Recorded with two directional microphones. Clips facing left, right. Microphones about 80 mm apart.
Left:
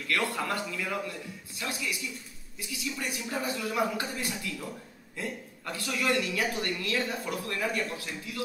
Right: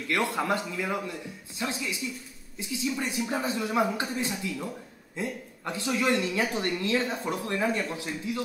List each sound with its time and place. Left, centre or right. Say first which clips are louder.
0.1 s a man's voice: right 3 dB; right